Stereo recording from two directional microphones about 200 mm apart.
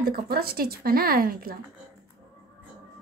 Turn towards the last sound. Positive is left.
turn(degrees=-45)  # may be behind; listen again after turning